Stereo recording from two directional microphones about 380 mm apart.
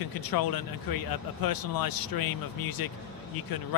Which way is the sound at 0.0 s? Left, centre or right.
Left.